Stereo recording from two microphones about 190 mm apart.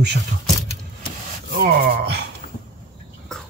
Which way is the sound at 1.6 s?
55° right (ahead or behind).